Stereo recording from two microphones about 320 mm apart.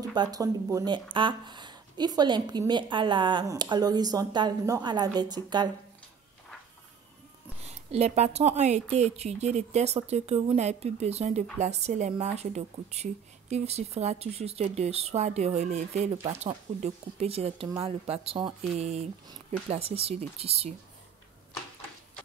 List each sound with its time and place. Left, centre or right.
0.1 s speech: centre
7.6 s speech: centre